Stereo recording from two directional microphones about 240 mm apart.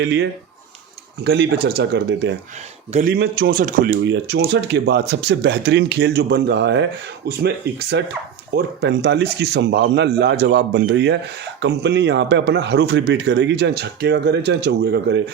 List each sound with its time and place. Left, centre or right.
0.0 s a man's voice: right
2.9 s speech: right
4.0 s a man's voice: right